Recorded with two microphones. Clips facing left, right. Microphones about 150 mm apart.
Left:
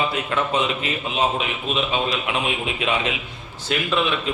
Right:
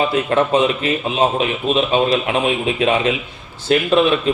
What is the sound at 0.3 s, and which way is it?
A man's voice, 45° right (ahead or behind).